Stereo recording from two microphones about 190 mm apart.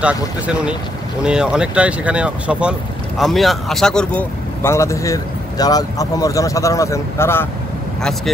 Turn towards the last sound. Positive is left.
turn(degrees=15)  # may be behind; listen again after turning